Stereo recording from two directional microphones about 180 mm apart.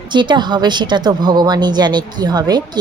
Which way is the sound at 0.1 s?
25° right (ahead or behind).